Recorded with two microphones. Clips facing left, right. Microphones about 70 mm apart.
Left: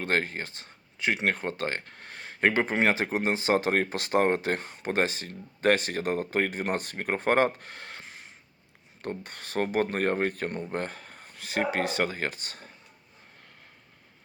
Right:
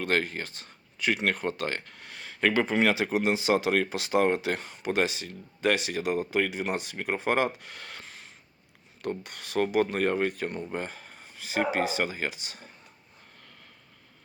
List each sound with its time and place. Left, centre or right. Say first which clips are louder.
0.0 s speech: even; left
9.0 s speech: right 2 dB; left